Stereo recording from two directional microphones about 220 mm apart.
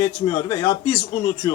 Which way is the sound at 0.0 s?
20° left (ahead or behind).